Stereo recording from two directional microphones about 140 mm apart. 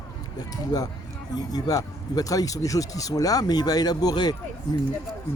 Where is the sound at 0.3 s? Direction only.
30° left (ahead or behind).